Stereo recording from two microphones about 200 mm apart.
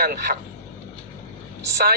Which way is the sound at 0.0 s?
50° right (ahead or behind).